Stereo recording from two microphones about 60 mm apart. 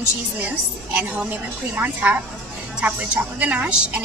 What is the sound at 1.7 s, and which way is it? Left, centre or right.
Speech, right.